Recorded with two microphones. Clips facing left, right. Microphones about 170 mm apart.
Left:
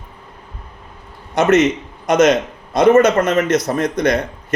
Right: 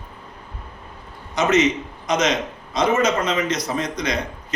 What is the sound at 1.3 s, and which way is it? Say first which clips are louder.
A man's voice: left 5 dB; 55° left (ahead or behind).